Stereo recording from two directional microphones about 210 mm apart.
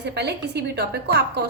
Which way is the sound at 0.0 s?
55° right (ahead or behind).